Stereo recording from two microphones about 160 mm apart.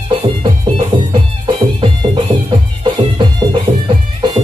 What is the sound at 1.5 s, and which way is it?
Music, 30° right (ahead or behind).